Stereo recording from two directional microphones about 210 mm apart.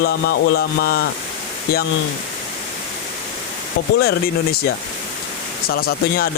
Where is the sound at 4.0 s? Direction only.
50° left (ahead or behind).